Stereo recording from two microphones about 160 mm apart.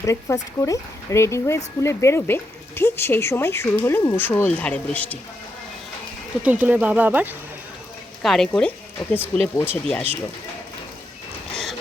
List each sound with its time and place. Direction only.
0.0 s speech: 20° left (ahead or behind)
6.4 s speech: 10° right (ahead or behind)
8.2 s speech: centre (ahead or behind)
9.0 s speech: 30° left (ahead or behind)
9.3 s speech: 15° left (ahead or behind)
11.5 s a sound: centre (ahead or behind)